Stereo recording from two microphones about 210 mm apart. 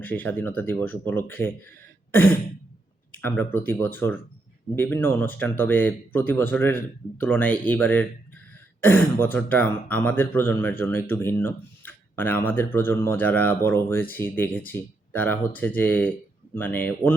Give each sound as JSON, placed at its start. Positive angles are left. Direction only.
{"t": 0.0, "sound": "speech", "side_deg": 10}
{"t": 3.2, "sound": "speech", "side_deg": 10}